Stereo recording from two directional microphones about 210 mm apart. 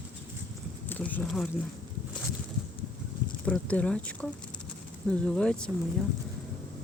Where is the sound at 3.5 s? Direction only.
5° left (ahead or behind).